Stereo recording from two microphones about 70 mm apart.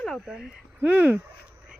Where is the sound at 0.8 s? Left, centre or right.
Right.